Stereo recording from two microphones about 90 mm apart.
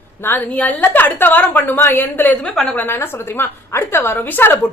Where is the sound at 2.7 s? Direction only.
25° left (ahead or behind).